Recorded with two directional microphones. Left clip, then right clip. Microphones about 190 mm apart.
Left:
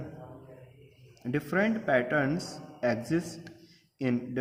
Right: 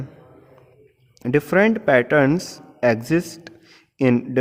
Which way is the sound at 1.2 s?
45° right (ahead or behind).